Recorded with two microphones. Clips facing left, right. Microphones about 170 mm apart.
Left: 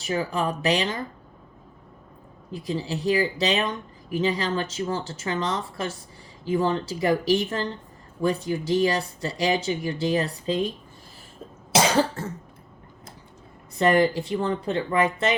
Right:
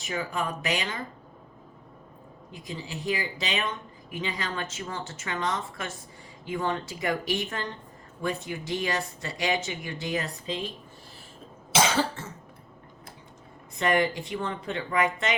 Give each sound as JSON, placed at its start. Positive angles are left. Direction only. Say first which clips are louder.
{"t": 0.0, "sound": "speech", "louder": "left 5 dB", "side_deg": 35}
{"t": 2.5, "sound": "speech", "louder": "left 9 dB", "side_deg": 35}
{"t": 13.7, "sound": "speech", "louder": "left 5 dB", "side_deg": 35}